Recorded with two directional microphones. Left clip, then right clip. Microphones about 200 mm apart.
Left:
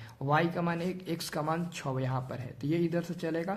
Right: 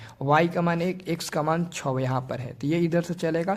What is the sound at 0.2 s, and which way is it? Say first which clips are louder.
Speech: right 7 dB; 30° right (ahead or behind).